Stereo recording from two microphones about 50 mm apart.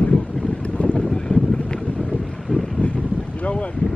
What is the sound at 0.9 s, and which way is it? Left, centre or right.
Wind noise, centre.